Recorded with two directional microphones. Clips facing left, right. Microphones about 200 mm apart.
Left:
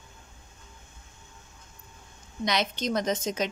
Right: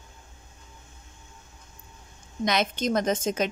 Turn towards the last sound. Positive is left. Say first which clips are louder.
# right 3 dB
turn(degrees=-50)  # may be behind; listen again after turning